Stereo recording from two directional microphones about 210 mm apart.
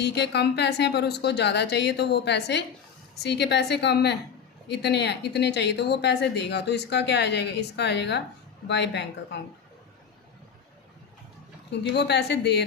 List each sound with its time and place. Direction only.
0.0 s a woman's voice: 55° left (ahead or behind)
11.8 s speech: 55° left (ahead or behind)